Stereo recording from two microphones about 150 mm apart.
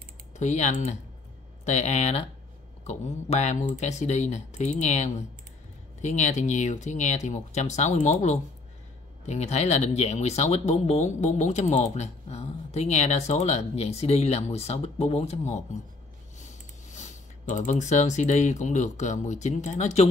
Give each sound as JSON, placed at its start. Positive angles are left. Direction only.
{"t": 0.4, "sound": "speech", "side_deg": 50}